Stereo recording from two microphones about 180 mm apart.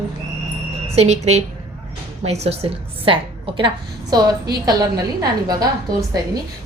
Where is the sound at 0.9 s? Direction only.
35° right (ahead or behind).